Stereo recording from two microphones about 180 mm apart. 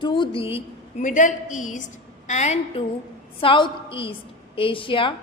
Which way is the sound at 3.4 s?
30° left (ahead or behind).